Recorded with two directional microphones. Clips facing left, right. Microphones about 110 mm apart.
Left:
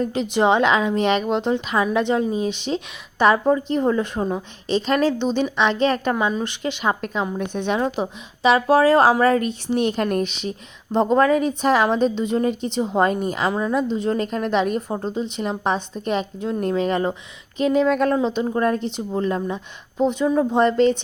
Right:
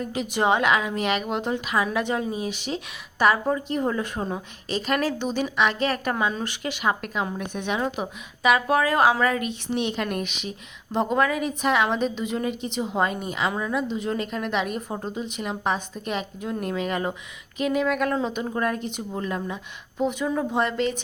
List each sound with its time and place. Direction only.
0.0 s a woman's voice: 30° left (ahead or behind)
13.5 s a woman's voice: 25° left (ahead or behind)